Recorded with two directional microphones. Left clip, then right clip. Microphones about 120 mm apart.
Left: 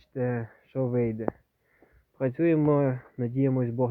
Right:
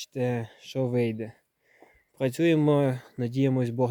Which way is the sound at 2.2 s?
90° right.